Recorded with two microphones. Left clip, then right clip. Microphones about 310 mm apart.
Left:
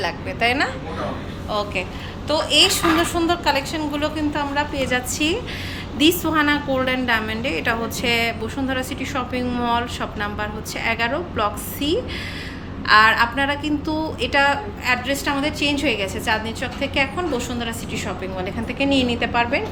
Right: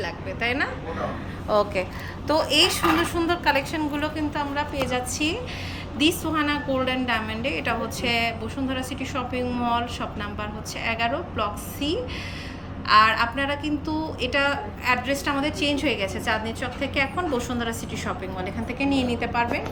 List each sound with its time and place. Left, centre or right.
0.0 s a woman's voice: centre
1.5 s a woman's voice: centre